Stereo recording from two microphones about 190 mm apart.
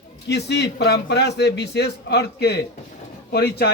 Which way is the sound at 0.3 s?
60° left (ahead or behind).